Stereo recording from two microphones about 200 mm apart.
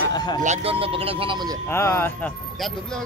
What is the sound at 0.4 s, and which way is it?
Speech, 35° right (ahead or behind).